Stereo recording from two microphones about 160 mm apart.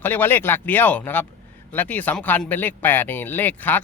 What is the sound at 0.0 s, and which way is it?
A man's voice, 10° left (ahead or behind).